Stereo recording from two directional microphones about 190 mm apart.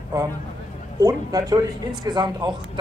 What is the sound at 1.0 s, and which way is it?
Speech, 20° right (ahead or behind).